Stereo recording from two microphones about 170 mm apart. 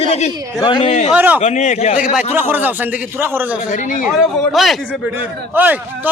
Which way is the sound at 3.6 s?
50° left (ahead or behind).